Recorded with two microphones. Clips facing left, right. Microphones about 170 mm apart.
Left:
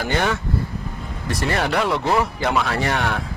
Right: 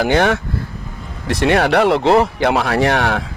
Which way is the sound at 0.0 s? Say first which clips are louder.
Right 7 dB; 75° right (ahead or behind).